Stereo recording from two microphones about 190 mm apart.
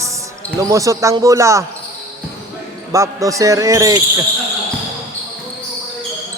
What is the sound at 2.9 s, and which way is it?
A man's voice, 15° right (ahead or behind).